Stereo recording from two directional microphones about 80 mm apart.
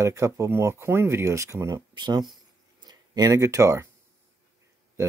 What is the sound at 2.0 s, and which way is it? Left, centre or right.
Speech, right.